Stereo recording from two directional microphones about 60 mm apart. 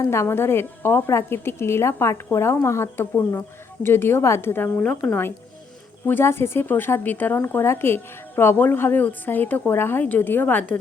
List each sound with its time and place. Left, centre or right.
0.1 s a woman's voice: left
4.8 s a woman's voice: centre
6.1 s a woman's voice: left